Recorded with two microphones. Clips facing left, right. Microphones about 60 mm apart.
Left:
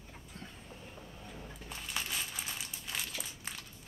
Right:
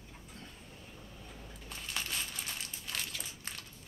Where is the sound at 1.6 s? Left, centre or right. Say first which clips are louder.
Even; centre.